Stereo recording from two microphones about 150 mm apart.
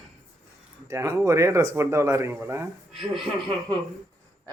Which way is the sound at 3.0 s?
Centre (ahead or behind).